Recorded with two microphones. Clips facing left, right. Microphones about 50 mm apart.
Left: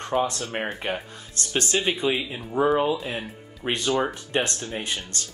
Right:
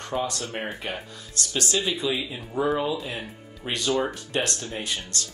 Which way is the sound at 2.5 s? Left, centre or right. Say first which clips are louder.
Left 4 dB; left.